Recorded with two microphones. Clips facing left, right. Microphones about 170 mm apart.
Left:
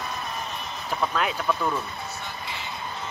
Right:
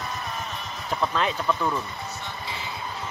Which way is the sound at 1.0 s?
5° left (ahead or behind).